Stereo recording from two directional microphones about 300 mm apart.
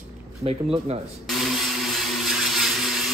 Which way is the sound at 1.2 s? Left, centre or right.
Centre.